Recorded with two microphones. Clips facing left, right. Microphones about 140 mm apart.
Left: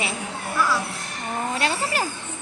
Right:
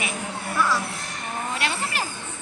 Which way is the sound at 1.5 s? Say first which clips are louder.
Left 4 dB; 35° left (ahead or behind).